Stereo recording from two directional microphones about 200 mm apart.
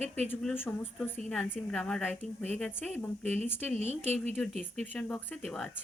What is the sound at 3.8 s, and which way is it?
Speech, 30° right (ahead or behind).